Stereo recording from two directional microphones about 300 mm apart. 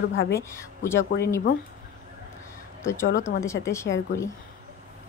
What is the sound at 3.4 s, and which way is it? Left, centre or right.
Speech, centre.